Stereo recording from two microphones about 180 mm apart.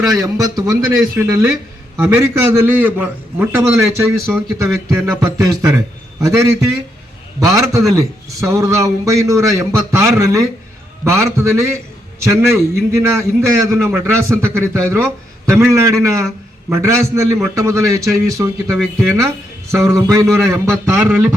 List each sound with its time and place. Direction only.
0.0 s a man's voice: 20° right (ahead or behind)
18.7 s speech: centre (ahead or behind)
19.7 s a man's voice: 15° right (ahead or behind)